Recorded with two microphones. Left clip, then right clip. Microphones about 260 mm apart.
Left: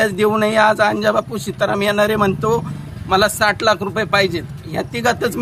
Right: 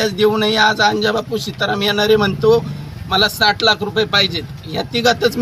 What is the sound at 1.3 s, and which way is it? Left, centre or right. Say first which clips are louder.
Speech: even; centre.